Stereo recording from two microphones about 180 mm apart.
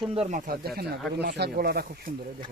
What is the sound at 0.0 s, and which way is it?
Speech, 35° right (ahead or behind).